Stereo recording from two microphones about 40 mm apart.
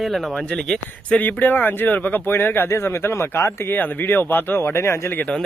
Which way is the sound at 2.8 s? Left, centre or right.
Left.